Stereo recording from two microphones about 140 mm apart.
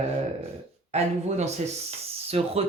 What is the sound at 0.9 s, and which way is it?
Speech, 55° right (ahead or behind).